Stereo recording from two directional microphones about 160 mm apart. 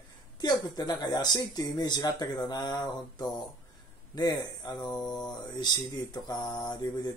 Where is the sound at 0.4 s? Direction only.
25° left (ahead or behind).